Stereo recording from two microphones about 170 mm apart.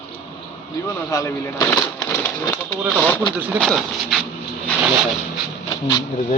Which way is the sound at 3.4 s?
10° right (ahead or behind).